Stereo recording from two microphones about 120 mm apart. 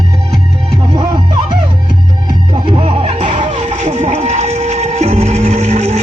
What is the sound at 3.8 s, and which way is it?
Music, 65° right (ahead or behind).